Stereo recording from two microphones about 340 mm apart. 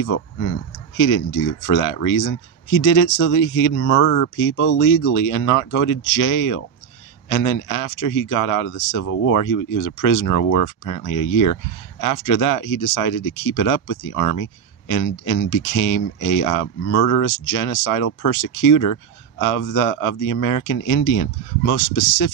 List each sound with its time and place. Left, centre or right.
0.9 s speech: left